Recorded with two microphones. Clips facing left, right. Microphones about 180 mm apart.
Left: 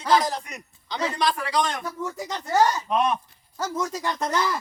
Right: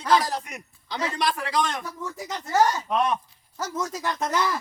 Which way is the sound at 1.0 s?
5° right (ahead or behind).